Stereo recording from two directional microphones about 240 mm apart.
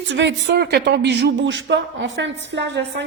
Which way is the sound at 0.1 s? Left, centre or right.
Right.